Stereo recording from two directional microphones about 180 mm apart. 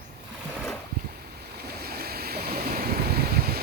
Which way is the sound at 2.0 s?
60° right (ahead or behind).